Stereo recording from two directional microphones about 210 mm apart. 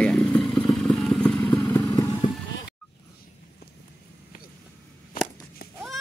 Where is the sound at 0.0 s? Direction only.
5° left (ahead or behind).